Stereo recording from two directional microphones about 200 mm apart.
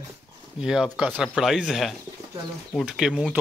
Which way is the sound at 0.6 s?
5° right (ahead or behind).